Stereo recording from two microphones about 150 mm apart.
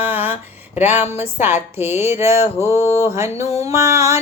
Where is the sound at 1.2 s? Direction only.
15° right (ahead or behind).